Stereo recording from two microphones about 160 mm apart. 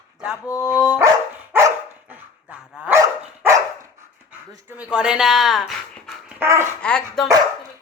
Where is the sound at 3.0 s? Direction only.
20° right (ahead or behind).